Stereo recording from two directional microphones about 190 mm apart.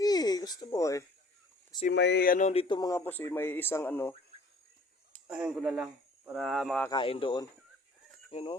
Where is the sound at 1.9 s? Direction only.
65° left (ahead or behind); by 2.6 s 40° left (ahead or behind).